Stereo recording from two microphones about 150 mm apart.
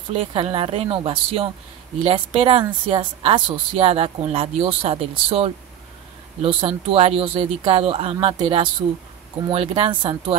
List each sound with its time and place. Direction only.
0.1 s speech: 40° right (ahead or behind)